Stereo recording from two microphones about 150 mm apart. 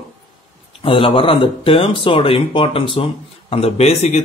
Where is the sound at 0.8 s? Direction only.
35° left (ahead or behind).